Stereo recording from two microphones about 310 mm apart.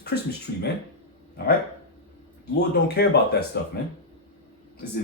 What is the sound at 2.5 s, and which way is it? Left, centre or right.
A man's voice, left.